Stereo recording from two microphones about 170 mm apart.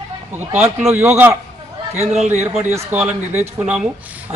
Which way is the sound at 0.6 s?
10° right (ahead or behind).